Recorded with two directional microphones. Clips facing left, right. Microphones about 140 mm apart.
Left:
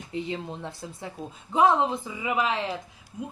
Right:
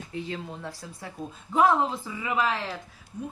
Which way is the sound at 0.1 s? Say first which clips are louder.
Left 3 dB; 20° left (ahead or behind).